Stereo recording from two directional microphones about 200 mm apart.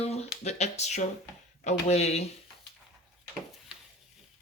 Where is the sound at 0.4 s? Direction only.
35° left (ahead or behind).